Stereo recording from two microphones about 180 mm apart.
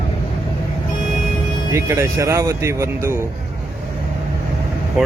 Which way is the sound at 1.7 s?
15° right (ahead or behind).